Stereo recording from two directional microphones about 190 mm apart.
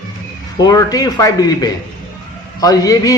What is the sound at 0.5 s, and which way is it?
A man's voice, 20° left (ahead or behind).